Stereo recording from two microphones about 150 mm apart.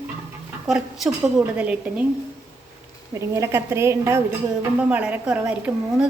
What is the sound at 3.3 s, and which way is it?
A woman's voice, 20° right (ahead or behind).